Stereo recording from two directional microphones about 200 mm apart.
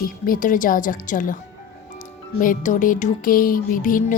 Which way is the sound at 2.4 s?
40° left (ahead or behind).